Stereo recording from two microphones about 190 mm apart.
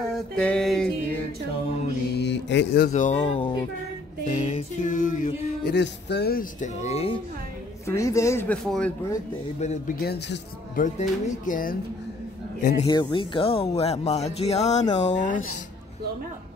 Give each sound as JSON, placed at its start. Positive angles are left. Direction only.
{"t": 0.4, "sound": "a sound", "side_deg": 5}
{"t": 2.1, "sound": "mantra", "side_deg": 65}
{"t": 2.9, "sound": "speech", "side_deg": 40}
{"t": 5.8, "sound": "speech", "side_deg": 60}
{"t": 6.6, "sound": "speech", "side_deg": 35}
{"t": 7.8, "sound": "a woman's voice", "side_deg": 15}
{"t": 8.6, "sound": "a sound", "side_deg": 5}
{"t": 9.6, "sound": "speech", "side_deg": 35}
{"t": 9.9, "sound": "speech", "side_deg": 60}
{"t": 10.8, "sound": "speech", "side_deg": 45}
{"t": 12.8, "sound": "speech", "side_deg": 25}